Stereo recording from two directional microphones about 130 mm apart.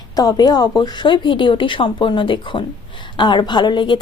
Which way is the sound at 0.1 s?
30° left (ahead or behind).